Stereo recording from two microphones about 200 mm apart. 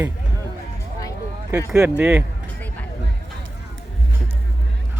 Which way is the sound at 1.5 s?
5° right (ahead or behind).